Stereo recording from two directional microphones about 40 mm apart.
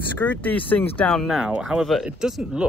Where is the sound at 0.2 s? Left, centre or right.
Left.